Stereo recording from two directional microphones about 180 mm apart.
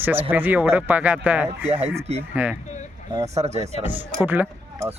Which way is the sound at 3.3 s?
35° right (ahead or behind).